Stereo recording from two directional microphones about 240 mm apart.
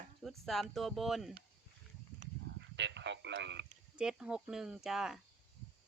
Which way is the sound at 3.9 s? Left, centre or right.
Centre.